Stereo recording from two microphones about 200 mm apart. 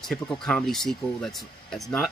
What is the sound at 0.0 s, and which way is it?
Speech, 5° left (ahead or behind).